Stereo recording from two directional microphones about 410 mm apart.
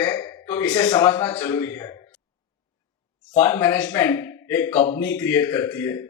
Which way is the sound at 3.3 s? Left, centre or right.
Centre.